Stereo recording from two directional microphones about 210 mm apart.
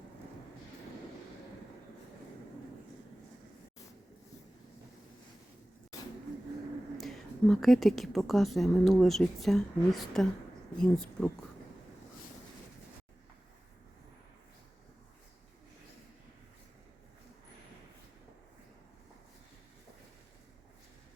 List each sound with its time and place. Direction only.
6.9 s a woman's voice: centre (ahead or behind)